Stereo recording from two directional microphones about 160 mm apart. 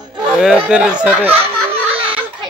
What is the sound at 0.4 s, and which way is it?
Speech, 5° right (ahead or behind).